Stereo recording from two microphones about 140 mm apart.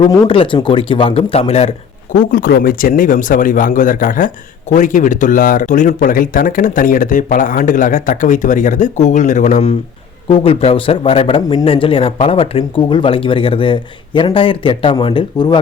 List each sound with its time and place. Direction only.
0.0 s a man's voice: 35° left (ahead or behind)
2.1 s speech: 90° left; by 9.6 s 60° left (ahead or behind)
10.2 s a man's voice: 40° left (ahead or behind)